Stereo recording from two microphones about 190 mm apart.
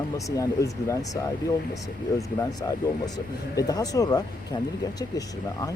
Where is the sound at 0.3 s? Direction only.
15° left (ahead or behind).